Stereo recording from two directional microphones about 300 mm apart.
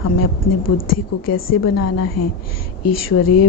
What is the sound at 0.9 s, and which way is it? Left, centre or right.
Speech, left.